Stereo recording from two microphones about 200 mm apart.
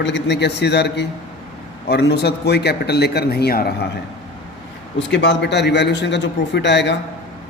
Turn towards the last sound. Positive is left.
turn(degrees=60)  # may be behind; listen again after turning